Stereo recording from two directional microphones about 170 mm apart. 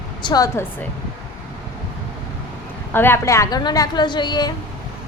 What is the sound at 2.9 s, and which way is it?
Speech, 10° left (ahead or behind).